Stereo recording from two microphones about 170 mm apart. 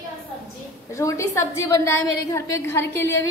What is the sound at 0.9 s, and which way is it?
A woman's voice, 15° left (ahead or behind).